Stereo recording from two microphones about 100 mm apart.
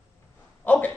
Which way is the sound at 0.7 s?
15° left (ahead or behind).